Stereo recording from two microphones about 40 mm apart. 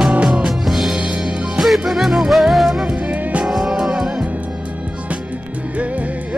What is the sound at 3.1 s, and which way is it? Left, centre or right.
Music, right.